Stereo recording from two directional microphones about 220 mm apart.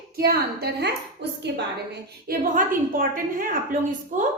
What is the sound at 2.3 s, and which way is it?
A woman's voice, 40° right (ahead or behind).